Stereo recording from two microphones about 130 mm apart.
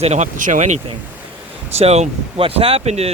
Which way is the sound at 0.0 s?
60° right (ahead or behind).